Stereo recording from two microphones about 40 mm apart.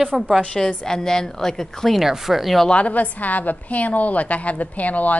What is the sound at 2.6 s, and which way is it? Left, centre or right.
A woman's voice, left.